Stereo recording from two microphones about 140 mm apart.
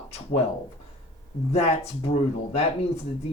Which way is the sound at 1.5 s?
45° left (ahead or behind).